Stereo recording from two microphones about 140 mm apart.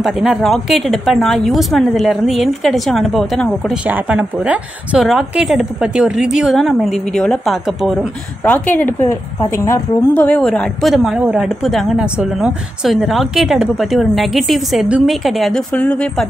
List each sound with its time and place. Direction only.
0.0 s speech: centre (ahead or behind)
3.8 s speech: 10° right (ahead or behind)
8.6 s a woman's voice: 15° left (ahead or behind)
10.2 s speech: 10° left (ahead or behind)